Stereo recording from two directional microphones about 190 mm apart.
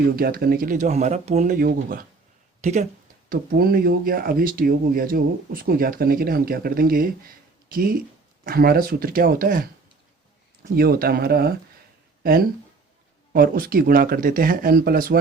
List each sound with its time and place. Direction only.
0.2 s speech: 55° right (ahead or behind)
2.6 s speech: 35° right (ahead or behind)
3.2 s speech: 50° right (ahead or behind)
10.8 s speech: 50° right (ahead or behind)